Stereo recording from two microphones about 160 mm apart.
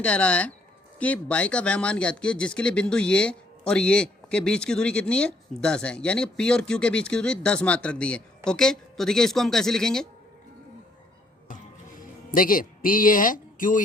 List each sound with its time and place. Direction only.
0.0 s speech: 10° left (ahead or behind)
12.3 s a man's voice: 60° left (ahead or behind)